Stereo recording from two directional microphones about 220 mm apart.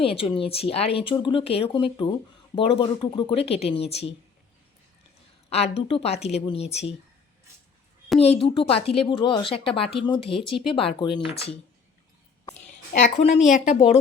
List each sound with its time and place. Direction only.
0.0 s speech: 25° left (ahead or behind)
5.5 s a woman's voice: 30° left (ahead or behind)
8.2 s speech: 25° left (ahead or behind)
12.9 s a woman's voice: 35° left (ahead or behind)